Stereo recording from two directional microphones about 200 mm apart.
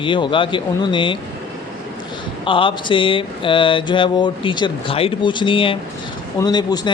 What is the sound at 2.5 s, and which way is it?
A man's voice, 25° left (ahead or behind).